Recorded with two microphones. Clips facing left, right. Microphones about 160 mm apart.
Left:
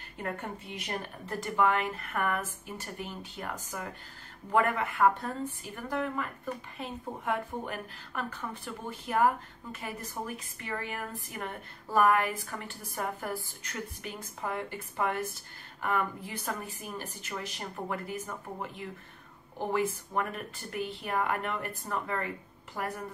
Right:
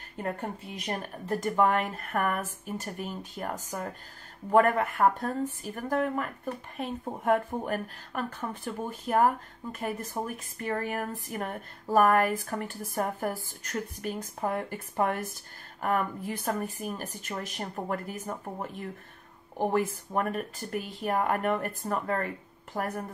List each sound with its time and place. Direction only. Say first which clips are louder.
0.2 s a woman's voice: right 3 dB; 35° right (ahead or behind)